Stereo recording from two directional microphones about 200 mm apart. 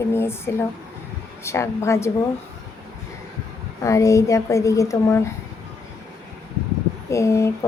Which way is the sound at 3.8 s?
15° left (ahead or behind).